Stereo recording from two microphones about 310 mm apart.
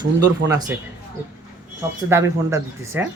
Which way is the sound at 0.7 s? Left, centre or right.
Centre.